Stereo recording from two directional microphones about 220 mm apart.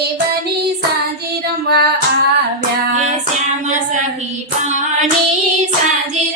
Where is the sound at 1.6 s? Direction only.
45° right (ahead or behind).